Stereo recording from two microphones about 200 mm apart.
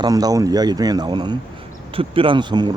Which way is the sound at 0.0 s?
20° right (ahead or behind).